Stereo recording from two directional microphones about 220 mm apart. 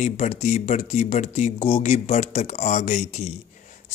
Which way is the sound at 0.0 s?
30° left (ahead or behind).